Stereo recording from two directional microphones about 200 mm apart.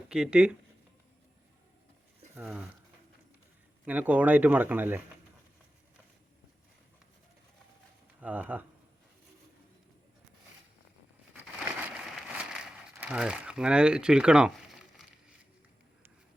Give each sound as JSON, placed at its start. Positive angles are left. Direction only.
{"t": 0.1, "sound": "speech", "side_deg": -5}
{"t": 2.3, "sound": "speech", "side_deg": -5}
{"t": 3.8, "sound": "speech", "side_deg": -10}
{"t": 8.2, "sound": "speech", "side_deg": -10}
{"t": 11.8, "sound": "crumpling", "side_deg": -5}